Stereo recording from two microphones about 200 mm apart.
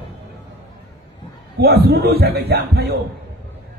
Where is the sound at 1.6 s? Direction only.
55° right (ahead or behind).